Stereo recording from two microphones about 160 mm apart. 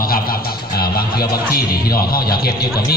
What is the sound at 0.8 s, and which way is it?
A man's voice, 75° left (ahead or behind).